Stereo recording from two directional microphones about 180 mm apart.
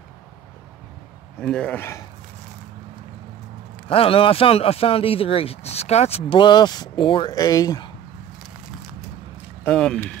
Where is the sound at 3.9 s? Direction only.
30° left (ahead or behind).